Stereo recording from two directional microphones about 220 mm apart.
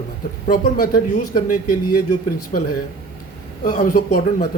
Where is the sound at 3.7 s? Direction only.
35° left (ahead or behind).